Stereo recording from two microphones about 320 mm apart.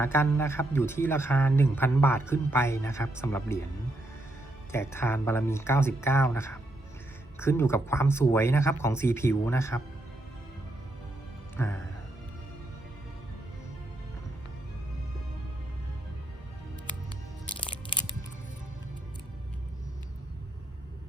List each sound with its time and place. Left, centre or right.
0.0 s a man's voice: centre
4.7 s a man's voice: centre
11.6 s a man's voice: centre
17.6 s music: centre